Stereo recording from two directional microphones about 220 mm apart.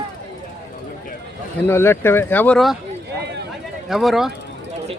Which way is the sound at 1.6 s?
10° left (ahead or behind).